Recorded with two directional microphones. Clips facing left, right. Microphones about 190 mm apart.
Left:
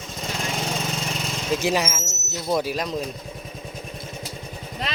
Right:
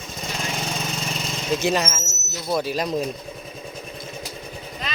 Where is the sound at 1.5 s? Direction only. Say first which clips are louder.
Right 1 dB; 10° left (ahead or behind).